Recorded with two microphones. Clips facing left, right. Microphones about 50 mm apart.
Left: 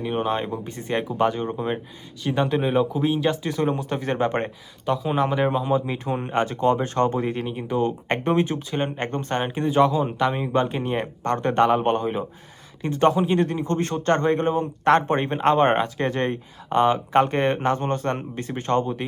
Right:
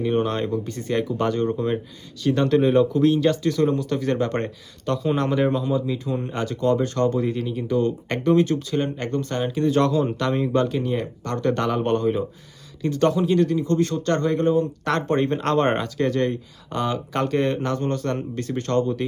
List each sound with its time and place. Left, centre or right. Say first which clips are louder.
0.0 s speech: right 2 dB; centre; by 5.8 s left
5.8 s speech: right 1 dB; left
9.7 s speech: left 5 dB; centre